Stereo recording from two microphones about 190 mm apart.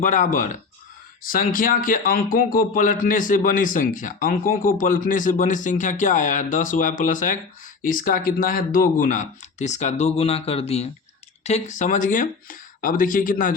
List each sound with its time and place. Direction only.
0.0 s a man's voice: 40° left (ahead or behind)